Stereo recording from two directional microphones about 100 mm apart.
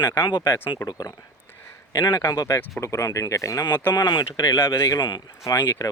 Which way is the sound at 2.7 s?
30° left (ahead or behind).